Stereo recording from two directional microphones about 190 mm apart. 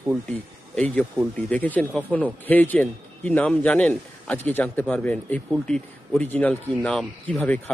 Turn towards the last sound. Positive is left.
turn(degrees=5)  # may be behind; listen again after turning